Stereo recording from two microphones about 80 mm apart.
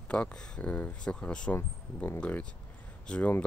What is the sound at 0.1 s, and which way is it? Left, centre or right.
Speech, centre.